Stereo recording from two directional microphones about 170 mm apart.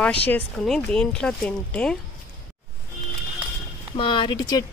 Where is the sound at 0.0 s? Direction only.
10° left (ahead or behind).